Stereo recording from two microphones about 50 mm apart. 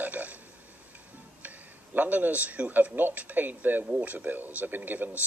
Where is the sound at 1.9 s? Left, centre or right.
Right.